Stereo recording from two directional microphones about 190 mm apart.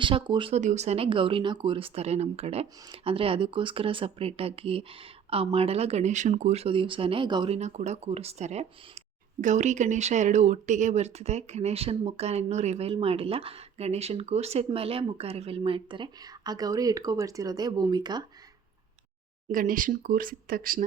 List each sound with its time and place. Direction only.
0.0 s speech: 25° right (ahead or behind)
19.5 s speech: 45° right (ahead or behind)